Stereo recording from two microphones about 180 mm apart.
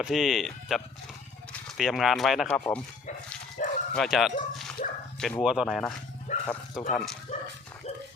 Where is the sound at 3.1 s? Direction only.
40° left (ahead or behind).